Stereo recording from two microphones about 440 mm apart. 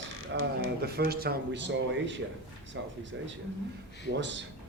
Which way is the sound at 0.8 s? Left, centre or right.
Right.